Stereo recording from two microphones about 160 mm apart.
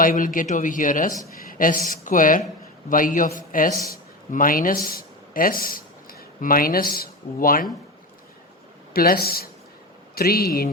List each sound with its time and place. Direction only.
0.0 s speech: 60° left (ahead or behind)
8.9 s speech: 70° left (ahead or behind)